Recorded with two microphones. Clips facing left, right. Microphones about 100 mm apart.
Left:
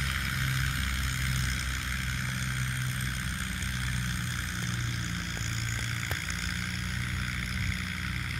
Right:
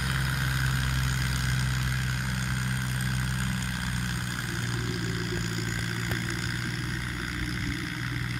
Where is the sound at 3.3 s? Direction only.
55° right (ahead or behind).